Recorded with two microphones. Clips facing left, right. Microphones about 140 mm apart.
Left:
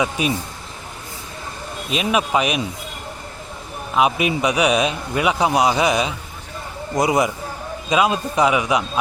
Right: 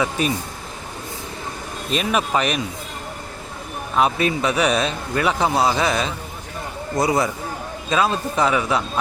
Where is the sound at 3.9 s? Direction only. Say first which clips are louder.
Left 1 dB; 10° left (ahead or behind).